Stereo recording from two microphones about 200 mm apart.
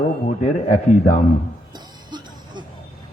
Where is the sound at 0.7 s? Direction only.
40° left (ahead or behind).